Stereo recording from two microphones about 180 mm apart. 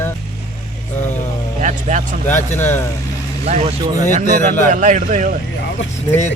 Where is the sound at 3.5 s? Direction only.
35° right (ahead or behind).